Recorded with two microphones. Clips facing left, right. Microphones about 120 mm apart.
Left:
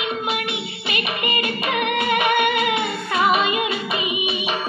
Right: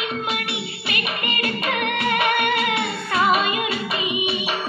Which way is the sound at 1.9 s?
15° left (ahead or behind).